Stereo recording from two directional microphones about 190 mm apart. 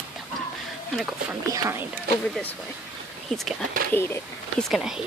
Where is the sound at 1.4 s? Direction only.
15° right (ahead or behind).